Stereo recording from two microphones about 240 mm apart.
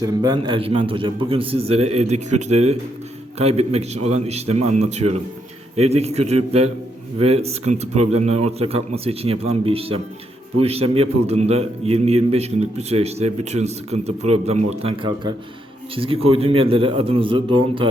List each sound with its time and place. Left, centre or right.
0.0 s a man's voice: centre